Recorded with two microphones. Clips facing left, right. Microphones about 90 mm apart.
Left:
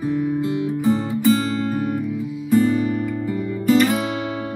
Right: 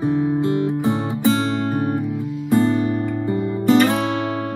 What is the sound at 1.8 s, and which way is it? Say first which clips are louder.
Music: right 2 dB; 25° right (ahead or behind).